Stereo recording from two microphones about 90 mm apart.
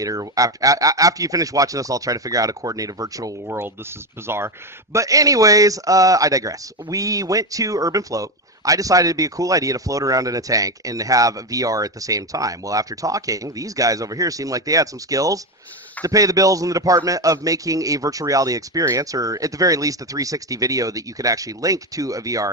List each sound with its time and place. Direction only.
0.0 s speech: 40° right (ahead or behind)
3.4 s speech: 30° right (ahead or behind)
4.9 s speech: 40° right (ahead or behind)